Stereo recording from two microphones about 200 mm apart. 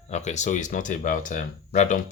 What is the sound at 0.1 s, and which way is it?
Speech, 35° left (ahead or behind).